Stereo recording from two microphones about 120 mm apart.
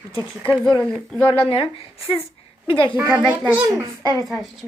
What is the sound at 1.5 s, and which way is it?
A woman's voice, 50° left (ahead or behind).